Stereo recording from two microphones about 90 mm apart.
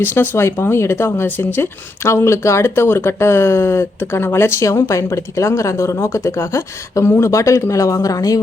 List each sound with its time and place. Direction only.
0.0 s speech: 25° left (ahead or behind); by 8.4 s 40° left (ahead or behind)